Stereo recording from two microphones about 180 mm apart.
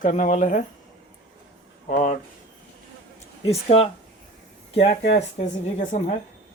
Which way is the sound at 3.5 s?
35° left (ahead or behind).